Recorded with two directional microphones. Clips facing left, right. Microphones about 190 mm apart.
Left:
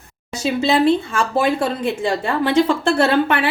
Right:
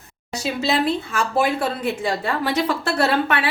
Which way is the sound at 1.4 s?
25° left (ahead or behind).